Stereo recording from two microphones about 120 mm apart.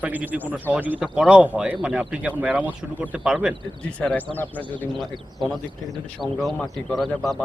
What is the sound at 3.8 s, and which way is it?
Speech, 10° left (ahead or behind).